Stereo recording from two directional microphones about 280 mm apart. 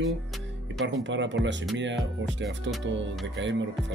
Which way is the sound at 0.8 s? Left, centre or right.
Right.